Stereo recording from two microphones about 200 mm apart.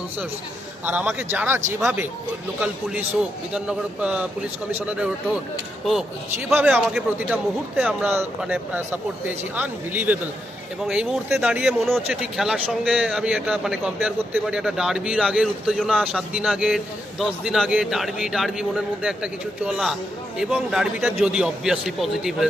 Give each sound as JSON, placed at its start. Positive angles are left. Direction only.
{"t": 0.9, "sound": "a man's voice", "side_deg": -10}